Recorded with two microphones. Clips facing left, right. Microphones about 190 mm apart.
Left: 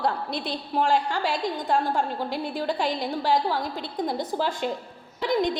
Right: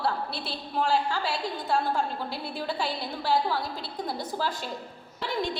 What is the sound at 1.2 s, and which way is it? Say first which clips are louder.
A woman's voice: left 4 dB; 15° left (ahead or behind).